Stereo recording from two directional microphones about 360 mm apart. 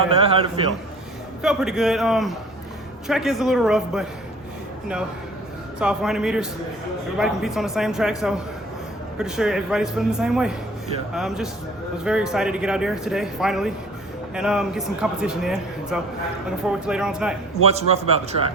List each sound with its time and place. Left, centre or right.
0.1 s a man's voice: centre
1.4 s a man's voice: centre
5.8 s a man's voice: centre
9.1 s a man's voice: centre
17.6 s a man's voice: centre